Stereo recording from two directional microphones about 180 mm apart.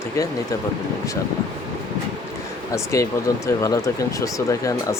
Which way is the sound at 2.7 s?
15° left (ahead or behind).